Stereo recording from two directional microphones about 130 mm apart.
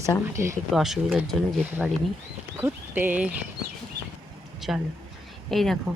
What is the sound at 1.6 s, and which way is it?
Speech, 15° right (ahead or behind).